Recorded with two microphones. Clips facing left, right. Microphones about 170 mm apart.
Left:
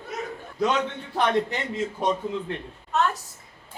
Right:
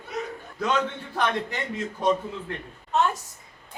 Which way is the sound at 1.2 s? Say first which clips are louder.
Left 4 dB; 20° left (ahead or behind).